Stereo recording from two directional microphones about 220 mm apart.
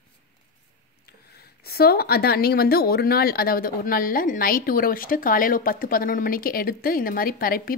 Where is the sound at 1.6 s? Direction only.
45° left (ahead or behind).